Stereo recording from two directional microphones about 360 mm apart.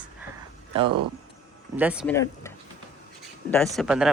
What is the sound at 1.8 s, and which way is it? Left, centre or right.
Speech, centre.